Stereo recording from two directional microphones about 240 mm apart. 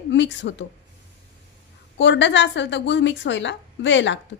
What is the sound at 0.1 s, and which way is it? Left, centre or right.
Speech, left.